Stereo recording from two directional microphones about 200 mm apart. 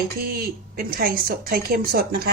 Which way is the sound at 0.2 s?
50° right (ahead or behind).